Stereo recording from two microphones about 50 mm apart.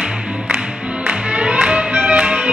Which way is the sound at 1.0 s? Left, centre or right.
Right.